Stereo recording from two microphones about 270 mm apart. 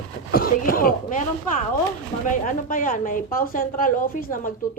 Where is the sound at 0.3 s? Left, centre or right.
Left.